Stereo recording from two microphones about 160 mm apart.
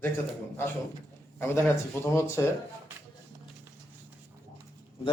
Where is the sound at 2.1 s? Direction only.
15° left (ahead or behind).